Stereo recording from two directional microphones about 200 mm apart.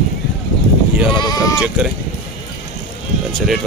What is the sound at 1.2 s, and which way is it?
Speech, 20° left (ahead or behind).